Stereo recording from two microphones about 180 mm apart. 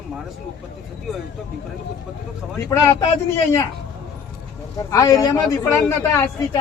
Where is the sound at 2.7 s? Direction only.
20° left (ahead or behind).